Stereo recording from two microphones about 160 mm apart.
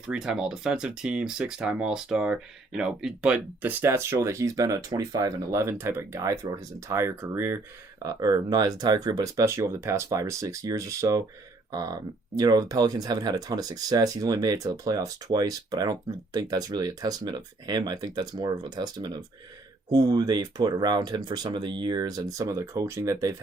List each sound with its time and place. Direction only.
0.1 s speech: 5° right (ahead or behind)